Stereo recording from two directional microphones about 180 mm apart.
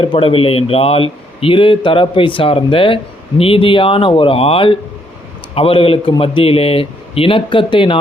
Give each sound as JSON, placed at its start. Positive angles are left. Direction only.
{"t": 0.0, "sound": "a man's voice", "side_deg": 30}